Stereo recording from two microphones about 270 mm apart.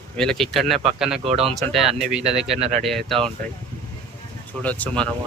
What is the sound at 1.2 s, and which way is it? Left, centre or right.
Speech, right.